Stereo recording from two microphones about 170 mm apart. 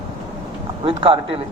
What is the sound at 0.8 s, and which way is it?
Speech, 30° right (ahead or behind).